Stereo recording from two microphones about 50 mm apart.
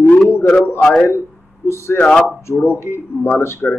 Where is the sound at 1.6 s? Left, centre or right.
Left.